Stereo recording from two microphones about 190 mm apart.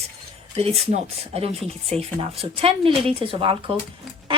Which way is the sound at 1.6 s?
Centre (ahead or behind).